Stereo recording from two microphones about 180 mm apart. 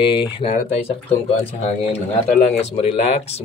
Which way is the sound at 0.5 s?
40° left (ahead or behind).